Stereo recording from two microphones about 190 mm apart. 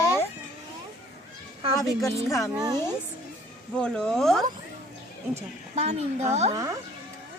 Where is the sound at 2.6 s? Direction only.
20° right (ahead or behind).